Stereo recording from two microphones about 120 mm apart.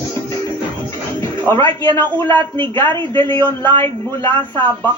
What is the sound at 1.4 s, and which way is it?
A man's voice, 20° left (ahead or behind).